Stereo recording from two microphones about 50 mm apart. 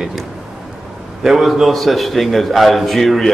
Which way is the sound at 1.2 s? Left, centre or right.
Centre.